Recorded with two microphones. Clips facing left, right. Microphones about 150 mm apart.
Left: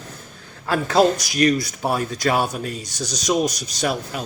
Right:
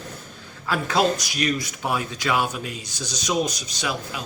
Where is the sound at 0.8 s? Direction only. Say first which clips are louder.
Left 5 dB; 40° left (ahead or behind).